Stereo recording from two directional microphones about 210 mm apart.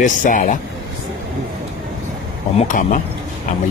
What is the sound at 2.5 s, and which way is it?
Speech, 35° left (ahead or behind).